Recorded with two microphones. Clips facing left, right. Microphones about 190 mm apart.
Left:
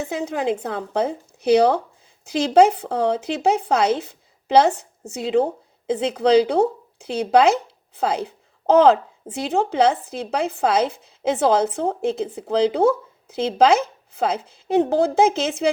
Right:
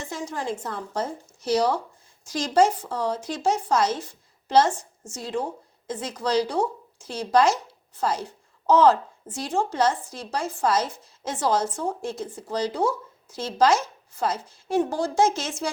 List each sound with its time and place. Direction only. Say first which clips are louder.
0.0 s speech: left 7 dB; 60° left (ahead or behind)